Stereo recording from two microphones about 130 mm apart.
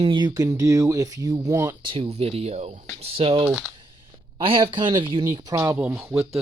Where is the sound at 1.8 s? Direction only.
45° right (ahead or behind).